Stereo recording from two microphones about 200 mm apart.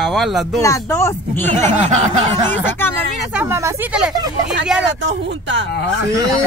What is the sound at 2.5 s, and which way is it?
Speech, 10° left (ahead or behind).